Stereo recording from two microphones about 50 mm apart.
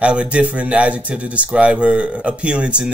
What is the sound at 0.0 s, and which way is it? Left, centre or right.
Speech, right.